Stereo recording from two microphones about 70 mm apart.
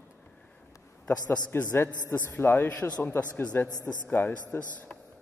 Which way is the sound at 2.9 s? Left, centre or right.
Left.